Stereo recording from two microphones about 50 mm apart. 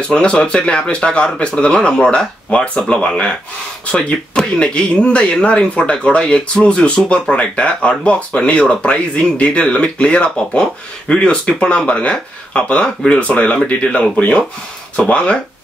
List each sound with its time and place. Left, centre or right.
0.1 s speech: centre
15.0 s speech: left